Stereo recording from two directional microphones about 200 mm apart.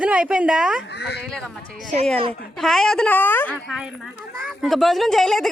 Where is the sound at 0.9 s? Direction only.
55° left (ahead or behind).